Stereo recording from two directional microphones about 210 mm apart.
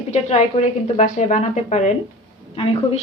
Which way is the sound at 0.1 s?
30° left (ahead or behind).